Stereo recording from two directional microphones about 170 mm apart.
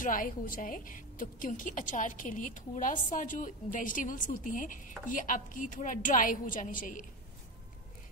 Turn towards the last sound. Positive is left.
turn(degrees=50)  # may be behind; listen again after turning